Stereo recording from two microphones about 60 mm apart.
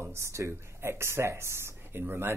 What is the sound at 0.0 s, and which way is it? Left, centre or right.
Speech, right.